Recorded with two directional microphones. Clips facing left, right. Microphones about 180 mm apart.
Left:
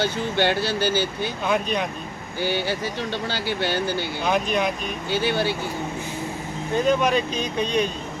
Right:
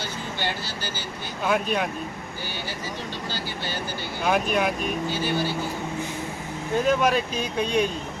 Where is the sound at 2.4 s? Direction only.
70° left (ahead or behind).